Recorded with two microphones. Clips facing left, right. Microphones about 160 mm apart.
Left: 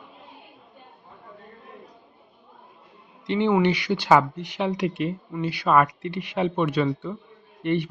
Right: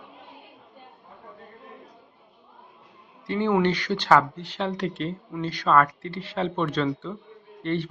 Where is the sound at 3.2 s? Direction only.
20° left (ahead or behind).